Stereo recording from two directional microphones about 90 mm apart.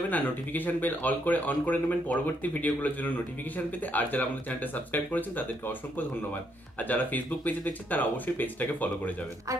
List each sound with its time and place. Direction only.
0.1 s speech: 20° left (ahead or behind)